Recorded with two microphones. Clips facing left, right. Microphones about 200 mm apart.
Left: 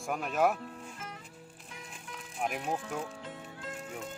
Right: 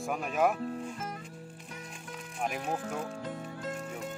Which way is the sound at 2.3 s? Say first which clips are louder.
Even; centre (ahead or behind).